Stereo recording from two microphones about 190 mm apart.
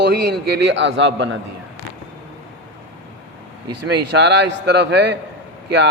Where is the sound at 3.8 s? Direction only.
65° right (ahead or behind).